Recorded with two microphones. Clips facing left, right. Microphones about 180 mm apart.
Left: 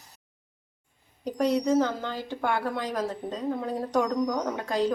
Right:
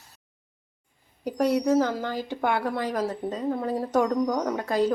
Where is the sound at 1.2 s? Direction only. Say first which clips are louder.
Right 2 dB; 10° right (ahead or behind).